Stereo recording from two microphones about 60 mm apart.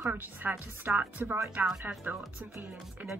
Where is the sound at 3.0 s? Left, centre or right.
Right.